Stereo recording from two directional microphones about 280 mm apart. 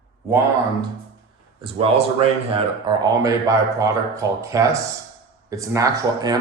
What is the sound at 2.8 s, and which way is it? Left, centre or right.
A man's voice, centre.